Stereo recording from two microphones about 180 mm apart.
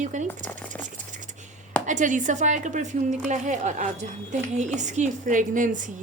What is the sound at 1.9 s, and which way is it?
A woman's voice, 45° right (ahead or behind).